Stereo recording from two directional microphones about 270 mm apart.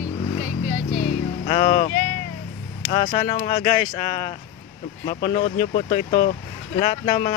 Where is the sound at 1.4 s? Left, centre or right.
Left.